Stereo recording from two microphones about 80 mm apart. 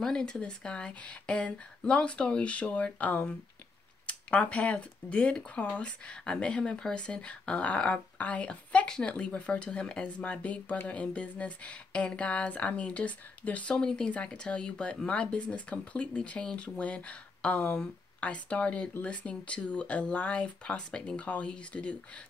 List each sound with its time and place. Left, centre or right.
0.0 s speech: centre